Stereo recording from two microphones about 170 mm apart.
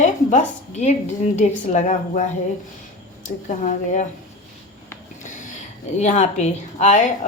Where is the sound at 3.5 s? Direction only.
50° left (ahead or behind).